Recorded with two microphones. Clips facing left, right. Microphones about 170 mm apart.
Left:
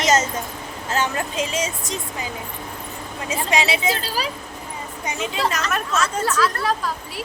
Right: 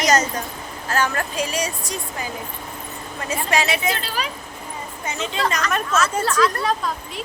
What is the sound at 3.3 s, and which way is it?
Speech, 20° left (ahead or behind).